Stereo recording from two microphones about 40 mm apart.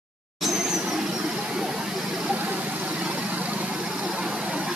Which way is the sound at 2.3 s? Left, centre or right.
Right.